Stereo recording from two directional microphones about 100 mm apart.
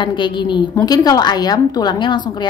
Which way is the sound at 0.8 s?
40° left (ahead or behind).